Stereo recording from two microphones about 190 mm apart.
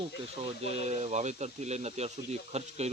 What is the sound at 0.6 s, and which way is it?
Speech, 35° right (ahead or behind).